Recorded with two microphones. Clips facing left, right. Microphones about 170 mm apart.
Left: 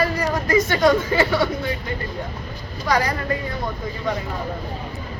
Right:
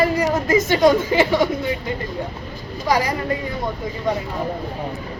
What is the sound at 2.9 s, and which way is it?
Speech, 20° right (ahead or behind).